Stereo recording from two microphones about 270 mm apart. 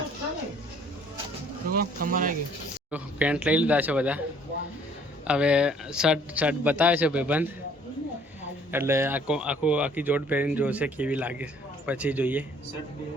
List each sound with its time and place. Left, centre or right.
1.7 s speech: right
2.9 s speech: centre
5.2 s speech: centre
8.7 s speech: centre